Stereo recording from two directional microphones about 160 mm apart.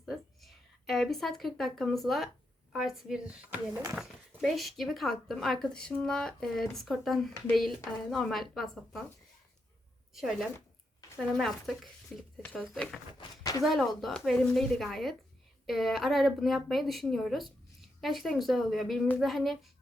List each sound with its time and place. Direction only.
0.0 s a woman's voice: centre (ahead or behind)
10.2 s a woman's voice: centre (ahead or behind)
13.1 s speech: 20° left (ahead or behind)
13.6 s a woman's voice: centre (ahead or behind)